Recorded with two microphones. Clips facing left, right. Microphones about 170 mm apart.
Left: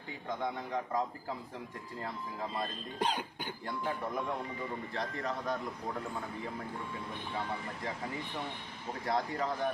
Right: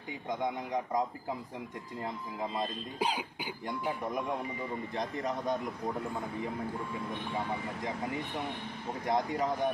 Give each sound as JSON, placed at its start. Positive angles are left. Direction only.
{"t": 0.3, "sound": "a man's voice", "side_deg": -15}
{"t": 3.0, "sound": "a man's voice", "side_deg": -10}
{"t": 9.0, "sound": "speech", "side_deg": -20}